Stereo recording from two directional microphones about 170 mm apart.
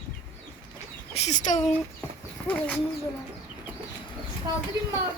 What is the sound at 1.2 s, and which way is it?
Speech, 45° left (ahead or behind).